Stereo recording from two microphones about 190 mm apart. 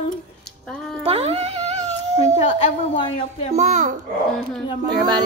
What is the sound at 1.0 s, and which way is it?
Speech, 30° right (ahead or behind).